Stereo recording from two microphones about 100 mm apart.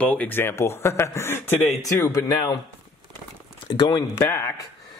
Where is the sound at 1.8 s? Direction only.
35° left (ahead or behind).